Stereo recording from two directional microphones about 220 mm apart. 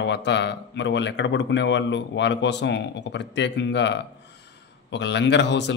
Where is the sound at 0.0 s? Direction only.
50° left (ahead or behind).